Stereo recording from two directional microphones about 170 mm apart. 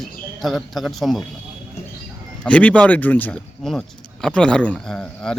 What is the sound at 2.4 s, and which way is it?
Speech, 5° left (ahead or behind).